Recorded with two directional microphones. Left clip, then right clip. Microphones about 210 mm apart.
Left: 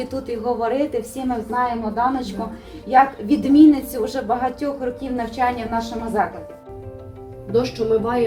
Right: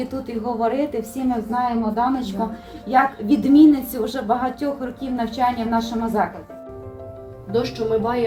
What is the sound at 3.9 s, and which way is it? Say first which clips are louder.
A woman's voice: even; 15° left (ahead or behind).